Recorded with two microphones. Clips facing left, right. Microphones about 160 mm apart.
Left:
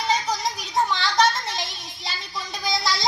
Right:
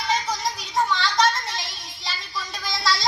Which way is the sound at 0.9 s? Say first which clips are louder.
Left 1 dB; 20° left (ahead or behind).